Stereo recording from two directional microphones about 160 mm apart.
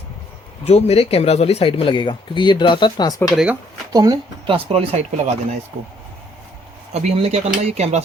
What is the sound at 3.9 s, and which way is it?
Speech, 25° right (ahead or behind).